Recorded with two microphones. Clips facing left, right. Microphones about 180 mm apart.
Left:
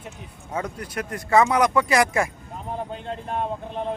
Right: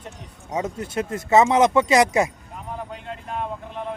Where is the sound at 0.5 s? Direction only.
25° right (ahead or behind).